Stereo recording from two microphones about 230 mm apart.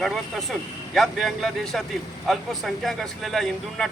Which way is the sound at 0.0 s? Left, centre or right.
Centre.